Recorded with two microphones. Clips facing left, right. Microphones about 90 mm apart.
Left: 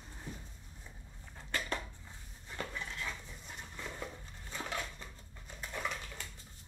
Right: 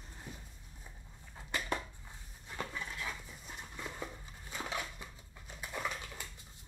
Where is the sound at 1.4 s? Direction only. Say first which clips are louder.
Right 1 dB; 15° right (ahead or behind).